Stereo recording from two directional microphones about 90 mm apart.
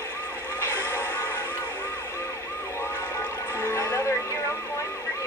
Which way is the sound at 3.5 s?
30° left (ahead or behind).